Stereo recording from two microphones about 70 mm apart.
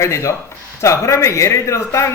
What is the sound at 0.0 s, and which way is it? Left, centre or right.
A man's voice, left.